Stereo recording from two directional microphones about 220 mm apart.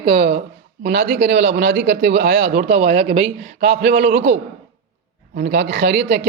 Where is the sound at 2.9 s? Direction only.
30° right (ahead or behind).